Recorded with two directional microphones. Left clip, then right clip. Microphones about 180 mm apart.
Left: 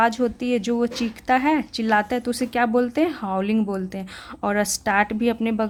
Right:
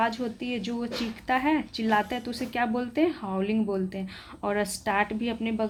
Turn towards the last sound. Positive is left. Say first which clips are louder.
# left 7 dB
turn(degrees=35)  # may be behind; listen again after turning